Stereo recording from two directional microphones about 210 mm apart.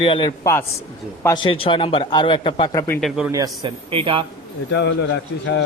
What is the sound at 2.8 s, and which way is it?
Speech, 10° left (ahead or behind).